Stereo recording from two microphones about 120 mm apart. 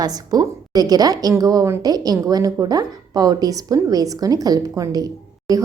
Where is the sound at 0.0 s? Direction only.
35° right (ahead or behind).